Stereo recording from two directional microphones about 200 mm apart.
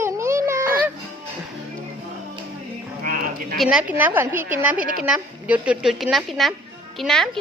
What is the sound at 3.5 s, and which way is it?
A woman's voice, centre (ahead or behind).